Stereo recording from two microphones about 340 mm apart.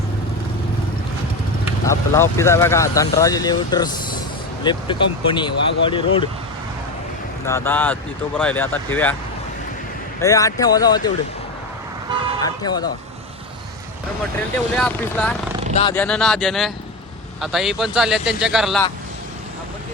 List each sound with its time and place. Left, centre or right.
1.9 s speech: centre
7.4 s a man's voice: centre
10.2 s speech: centre
12.4 s speech: centre
14.3 s a man's voice: centre
15.7 s speech: centre
16.0 s a man's voice: centre